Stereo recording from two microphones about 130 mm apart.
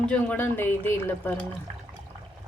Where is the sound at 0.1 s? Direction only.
10° left (ahead or behind).